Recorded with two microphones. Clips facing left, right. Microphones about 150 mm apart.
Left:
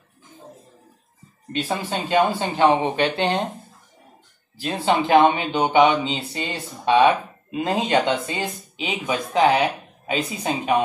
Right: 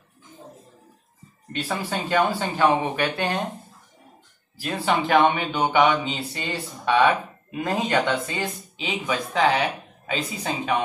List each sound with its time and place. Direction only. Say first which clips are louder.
1.5 s speech: left 2 dB; 20° left (ahead or behind)
4.6 s speech: left 3 dB; 25° left (ahead or behind)